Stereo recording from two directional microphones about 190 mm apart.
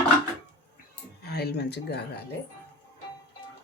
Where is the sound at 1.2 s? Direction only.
60° left (ahead or behind).